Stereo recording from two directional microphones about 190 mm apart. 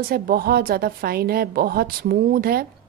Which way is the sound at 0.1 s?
55° right (ahead or behind).